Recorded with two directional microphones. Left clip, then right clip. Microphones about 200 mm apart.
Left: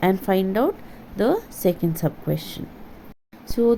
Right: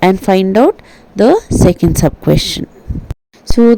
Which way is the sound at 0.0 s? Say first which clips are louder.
Right 10 dB; 40° right (ahead or behind).